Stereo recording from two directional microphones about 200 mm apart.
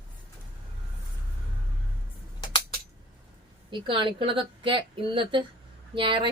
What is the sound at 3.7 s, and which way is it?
A woman's voice, 25° right (ahead or behind).